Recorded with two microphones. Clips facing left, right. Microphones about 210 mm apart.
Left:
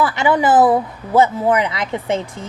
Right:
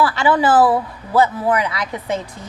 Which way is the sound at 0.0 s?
20° left (ahead or behind).